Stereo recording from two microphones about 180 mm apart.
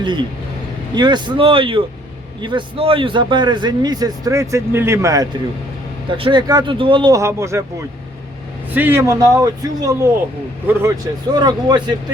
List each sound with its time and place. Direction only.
0.0 s a man's voice: 25° right (ahead or behind)
6.1 s a man's voice: 30° right (ahead or behind)
8.7 s a man's voice: 10° right (ahead or behind)